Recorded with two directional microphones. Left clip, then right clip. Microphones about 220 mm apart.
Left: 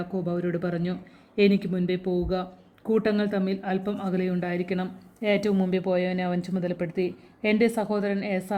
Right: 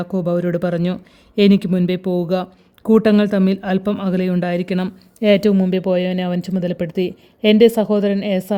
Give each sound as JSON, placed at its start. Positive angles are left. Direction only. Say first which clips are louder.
{"t": 0.0, "sound": "speech", "louder": "right 9 dB", "side_deg": -45}